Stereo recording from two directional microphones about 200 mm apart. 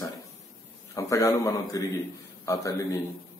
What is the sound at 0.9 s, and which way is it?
Speech, 15° left (ahead or behind).